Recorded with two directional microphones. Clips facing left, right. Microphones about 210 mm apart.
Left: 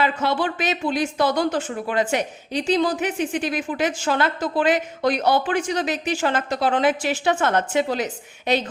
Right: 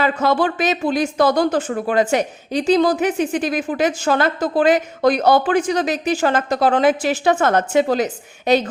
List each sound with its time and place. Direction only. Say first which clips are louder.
0.0 s speech: right 4 dB; 45° right (ahead or behind)